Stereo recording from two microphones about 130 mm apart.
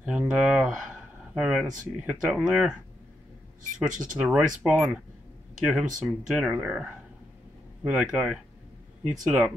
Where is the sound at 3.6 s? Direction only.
80° right.